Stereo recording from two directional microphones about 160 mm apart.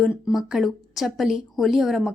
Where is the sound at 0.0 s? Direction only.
Centre (ahead or behind).